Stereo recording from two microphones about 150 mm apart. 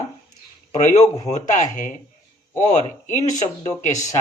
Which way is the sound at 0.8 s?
55° left (ahead or behind).